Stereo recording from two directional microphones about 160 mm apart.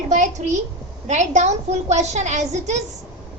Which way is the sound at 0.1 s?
50° right (ahead or behind).